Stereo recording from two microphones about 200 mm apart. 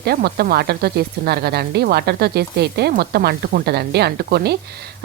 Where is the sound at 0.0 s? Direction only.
50° right (ahead or behind).